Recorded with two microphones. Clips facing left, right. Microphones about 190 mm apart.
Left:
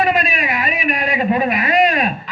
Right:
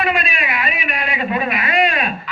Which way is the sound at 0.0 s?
40° left (ahead or behind).